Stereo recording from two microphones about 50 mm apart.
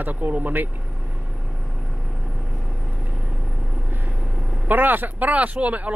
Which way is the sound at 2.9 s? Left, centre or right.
Centre.